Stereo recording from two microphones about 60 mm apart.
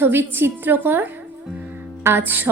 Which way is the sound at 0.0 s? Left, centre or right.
Right.